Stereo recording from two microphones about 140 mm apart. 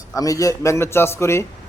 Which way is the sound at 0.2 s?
25° left (ahead or behind).